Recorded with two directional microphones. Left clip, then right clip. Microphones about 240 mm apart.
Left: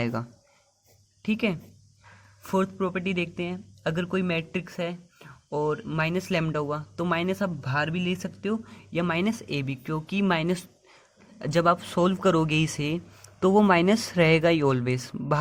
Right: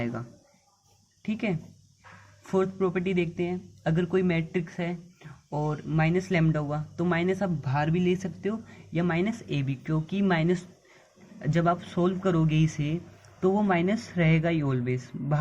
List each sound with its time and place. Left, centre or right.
0.0 s speech: left